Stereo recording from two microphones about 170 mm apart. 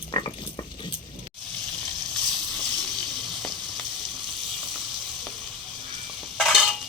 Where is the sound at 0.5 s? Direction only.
30° left (ahead or behind).